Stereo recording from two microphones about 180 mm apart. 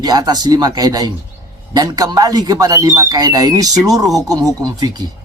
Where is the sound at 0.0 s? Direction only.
20° right (ahead or behind).